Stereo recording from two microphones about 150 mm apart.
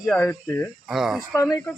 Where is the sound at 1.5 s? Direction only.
10° left (ahead or behind).